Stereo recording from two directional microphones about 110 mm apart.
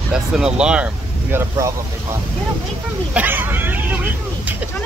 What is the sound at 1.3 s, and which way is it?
Speech, 25° right (ahead or behind).